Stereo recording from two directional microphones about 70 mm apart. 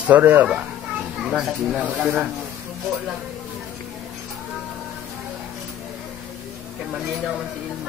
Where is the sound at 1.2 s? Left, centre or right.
Centre.